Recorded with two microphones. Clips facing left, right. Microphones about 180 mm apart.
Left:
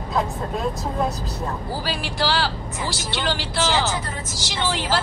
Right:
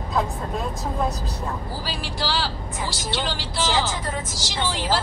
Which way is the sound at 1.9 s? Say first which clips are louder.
Left 4 dB; 65° left (ahead or behind).